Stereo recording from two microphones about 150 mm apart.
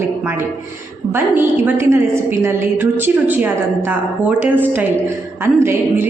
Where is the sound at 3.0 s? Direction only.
10° right (ahead or behind).